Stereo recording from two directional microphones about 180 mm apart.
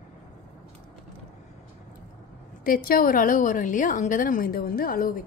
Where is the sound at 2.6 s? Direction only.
50° left (ahead or behind).